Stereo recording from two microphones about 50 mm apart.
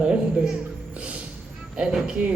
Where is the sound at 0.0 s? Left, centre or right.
Right.